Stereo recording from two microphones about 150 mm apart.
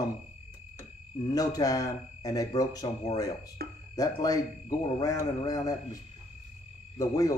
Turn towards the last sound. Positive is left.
turn(degrees=20)  # may be behind; listen again after turning